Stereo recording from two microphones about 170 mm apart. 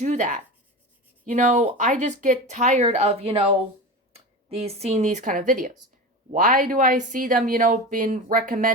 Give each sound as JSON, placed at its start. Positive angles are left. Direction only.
{"t": 0.0, "sound": "speech", "side_deg": -45}